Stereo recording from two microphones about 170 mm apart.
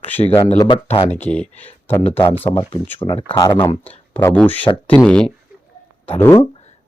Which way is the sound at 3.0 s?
30° left (ahead or behind).